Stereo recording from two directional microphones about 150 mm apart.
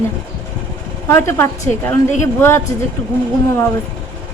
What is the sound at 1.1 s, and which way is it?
A woman's voice, 20° left (ahead or behind).